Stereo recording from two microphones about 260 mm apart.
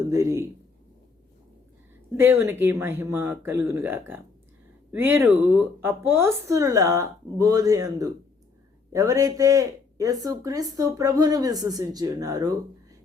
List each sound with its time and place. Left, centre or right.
0.1 s speech: centre
2.1 s speech: centre